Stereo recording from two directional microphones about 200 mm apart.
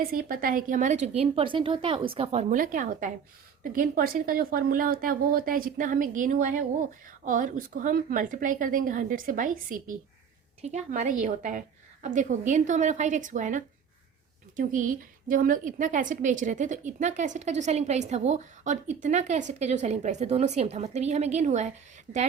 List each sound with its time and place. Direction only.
0.0 s a woman's voice: 45° right (ahead or behind)